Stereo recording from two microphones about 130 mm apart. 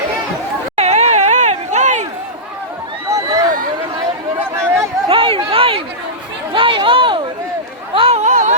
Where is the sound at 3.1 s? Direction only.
20° right (ahead or behind).